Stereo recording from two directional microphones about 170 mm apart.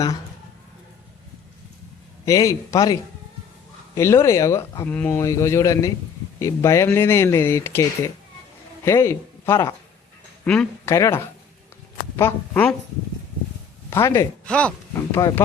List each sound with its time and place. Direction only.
2.2 s speech: 20° left (ahead or behind)
10.4 s speech: 5° left (ahead or behind)
10.8 s speech: 20° left (ahead or behind)
13.9 s speech: 15° left (ahead or behind)